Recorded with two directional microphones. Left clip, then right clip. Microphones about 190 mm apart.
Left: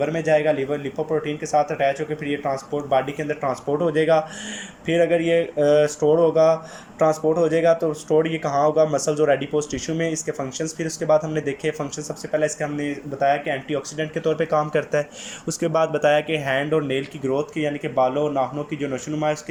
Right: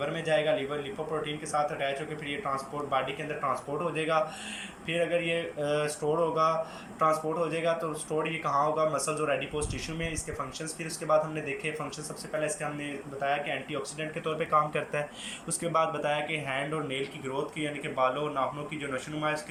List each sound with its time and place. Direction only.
0.0 s speech: 40° left (ahead or behind)